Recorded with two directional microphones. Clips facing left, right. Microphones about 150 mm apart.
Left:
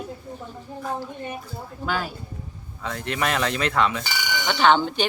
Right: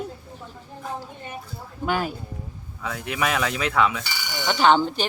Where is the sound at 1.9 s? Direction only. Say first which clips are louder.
Right 3 dB; 15° right (ahead or behind).